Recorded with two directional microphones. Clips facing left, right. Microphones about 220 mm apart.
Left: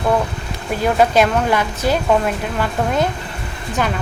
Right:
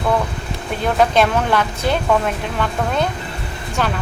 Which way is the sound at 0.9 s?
5° left (ahead or behind).